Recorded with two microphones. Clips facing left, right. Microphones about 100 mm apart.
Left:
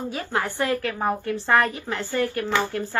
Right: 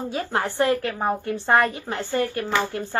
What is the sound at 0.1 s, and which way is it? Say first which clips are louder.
A woman's voice: right 3 dB; 25° right (ahead or behind).